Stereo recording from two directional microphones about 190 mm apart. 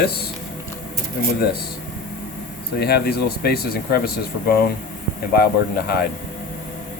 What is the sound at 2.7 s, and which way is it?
Speech, 55° left (ahead or behind).